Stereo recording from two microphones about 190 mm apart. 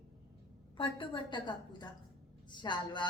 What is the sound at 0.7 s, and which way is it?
A woman's voice, 25° left (ahead or behind).